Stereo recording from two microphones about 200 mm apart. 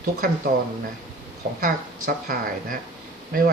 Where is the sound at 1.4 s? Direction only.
50° right (ahead or behind).